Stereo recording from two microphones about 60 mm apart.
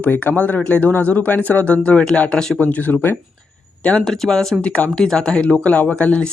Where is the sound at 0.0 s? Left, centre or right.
Left.